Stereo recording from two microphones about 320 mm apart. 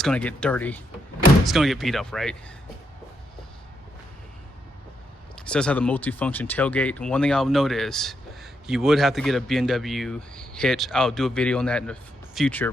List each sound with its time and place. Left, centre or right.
0.0 s speech: centre
5.4 s speech: centre